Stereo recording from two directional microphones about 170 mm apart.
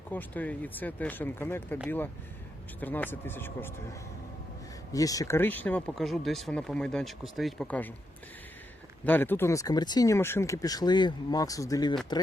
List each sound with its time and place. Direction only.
0.1 s speech: 10° left (ahead or behind)
2.8 s speech: 10° left (ahead or behind)
4.9 s speech: 20° left (ahead or behind)
9.0 s speech: 10° left (ahead or behind)